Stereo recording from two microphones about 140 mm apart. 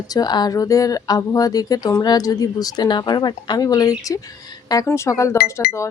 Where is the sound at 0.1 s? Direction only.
30° left (ahead or behind).